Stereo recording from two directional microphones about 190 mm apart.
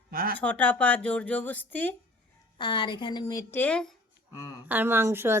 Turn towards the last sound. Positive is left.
turn(degrees=-15)  # may be behind; listen again after turning